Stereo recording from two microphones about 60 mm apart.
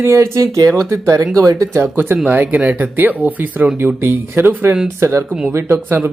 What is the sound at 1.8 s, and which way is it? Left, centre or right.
Speech, right.